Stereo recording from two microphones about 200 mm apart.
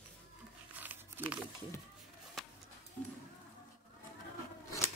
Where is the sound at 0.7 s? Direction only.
10° right (ahead or behind).